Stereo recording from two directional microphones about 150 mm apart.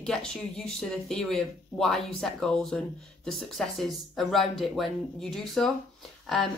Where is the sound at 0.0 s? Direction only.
5° left (ahead or behind).